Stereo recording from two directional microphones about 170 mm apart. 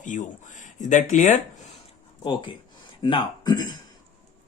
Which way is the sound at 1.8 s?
30° left (ahead or behind).